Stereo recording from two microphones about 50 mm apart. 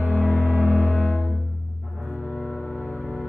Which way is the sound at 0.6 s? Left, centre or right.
Right.